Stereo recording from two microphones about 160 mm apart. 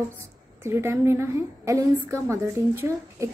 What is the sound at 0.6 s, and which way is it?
A woman's voice, 15° right (ahead or behind).